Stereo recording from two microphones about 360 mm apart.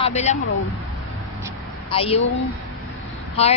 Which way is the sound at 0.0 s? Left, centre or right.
Centre.